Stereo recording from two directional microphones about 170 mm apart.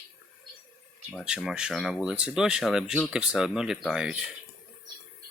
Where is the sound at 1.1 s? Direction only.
5° right (ahead or behind).